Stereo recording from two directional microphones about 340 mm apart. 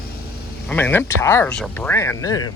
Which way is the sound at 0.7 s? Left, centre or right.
Centre.